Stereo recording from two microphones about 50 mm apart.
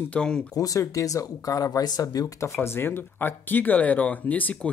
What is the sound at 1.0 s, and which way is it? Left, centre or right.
Speech, left.